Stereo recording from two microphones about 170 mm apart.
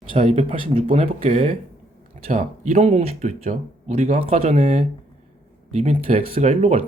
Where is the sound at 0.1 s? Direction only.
35° right (ahead or behind).